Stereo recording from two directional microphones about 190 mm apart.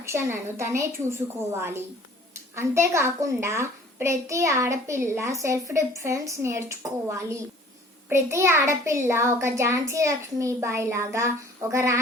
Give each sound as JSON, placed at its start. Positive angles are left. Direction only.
{"t": 0.0, "sound": "a child's voice", "side_deg": -15}